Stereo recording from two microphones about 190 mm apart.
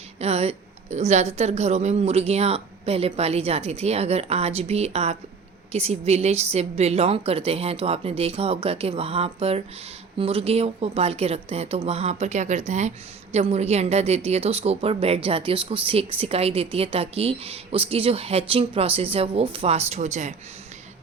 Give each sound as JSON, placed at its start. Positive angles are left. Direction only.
{"t": 0.2, "sound": "a woman's voice", "side_deg": -35}